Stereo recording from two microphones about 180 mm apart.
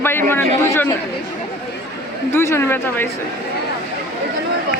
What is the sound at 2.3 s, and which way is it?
Speech, 15° left (ahead or behind).